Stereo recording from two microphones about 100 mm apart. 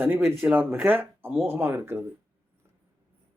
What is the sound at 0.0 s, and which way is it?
Speech, 20° right (ahead or behind).